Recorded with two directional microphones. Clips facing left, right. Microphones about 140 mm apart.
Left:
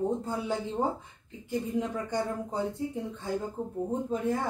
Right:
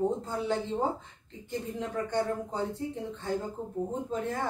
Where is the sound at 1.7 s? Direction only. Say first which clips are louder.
Right 1 dB; 10° left (ahead or behind).